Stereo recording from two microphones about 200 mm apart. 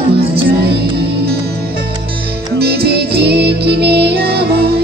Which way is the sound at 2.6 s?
55° right (ahead or behind).